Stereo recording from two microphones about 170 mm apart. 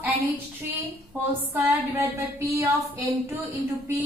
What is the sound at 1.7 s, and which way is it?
A woman's voice, 15° right (ahead or behind).